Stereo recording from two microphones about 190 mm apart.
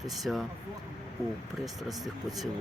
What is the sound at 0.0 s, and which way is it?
Speech, centre (ahead or behind).